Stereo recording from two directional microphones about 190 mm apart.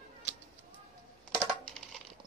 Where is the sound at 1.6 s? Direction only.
5° left (ahead or behind).